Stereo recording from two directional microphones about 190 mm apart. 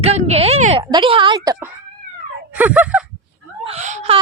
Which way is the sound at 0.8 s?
25° right (ahead or behind).